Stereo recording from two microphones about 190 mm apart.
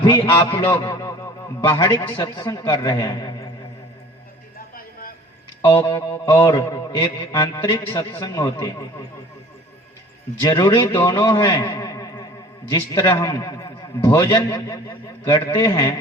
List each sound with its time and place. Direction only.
0.0 s a man's voice: 25° left (ahead or behind)
4.5 s a sound: 50° left (ahead or behind)
5.6 s a man's voice: 25° left (ahead or behind)
10.5 s a man's voice: 20° left (ahead or behind)